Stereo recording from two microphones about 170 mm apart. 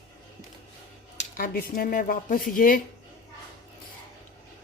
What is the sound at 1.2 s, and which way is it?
Speech, 55° left (ahead or behind).